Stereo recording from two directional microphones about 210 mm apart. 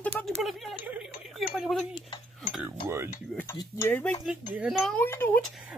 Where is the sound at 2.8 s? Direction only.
10° right (ahead or behind).